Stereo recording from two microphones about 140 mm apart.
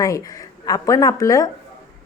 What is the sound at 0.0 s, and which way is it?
Speech, 25° left (ahead or behind).